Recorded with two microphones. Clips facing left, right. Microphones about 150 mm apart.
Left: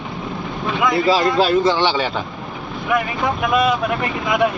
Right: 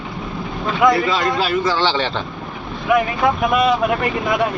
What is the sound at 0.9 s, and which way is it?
Speech, 30° left (ahead or behind).